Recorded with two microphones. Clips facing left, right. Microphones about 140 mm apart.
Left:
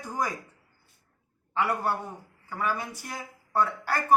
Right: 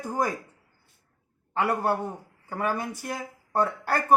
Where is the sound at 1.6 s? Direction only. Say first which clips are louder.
Right 3 dB; 50° right (ahead or behind).